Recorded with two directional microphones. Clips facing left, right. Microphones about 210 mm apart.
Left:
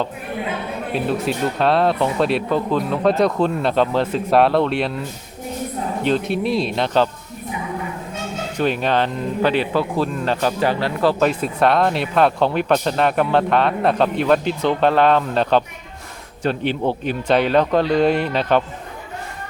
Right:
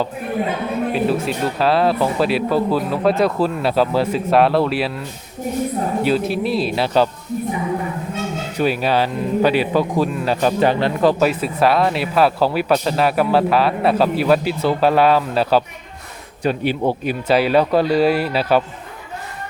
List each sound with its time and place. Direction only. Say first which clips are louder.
0.9 s speech: left 2 dB; centre (ahead or behind)
8.5 s a man's voice: right 1 dB; 10° right (ahead or behind)
11.3 s speech: right 1 dB; 5° right (ahead or behind)